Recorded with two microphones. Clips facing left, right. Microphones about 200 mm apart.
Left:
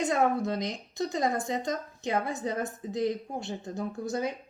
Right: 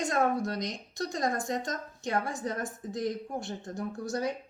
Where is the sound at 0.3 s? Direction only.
5° left (ahead or behind).